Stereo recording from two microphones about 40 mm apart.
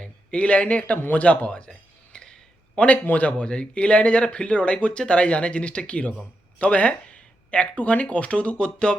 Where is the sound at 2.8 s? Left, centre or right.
Left.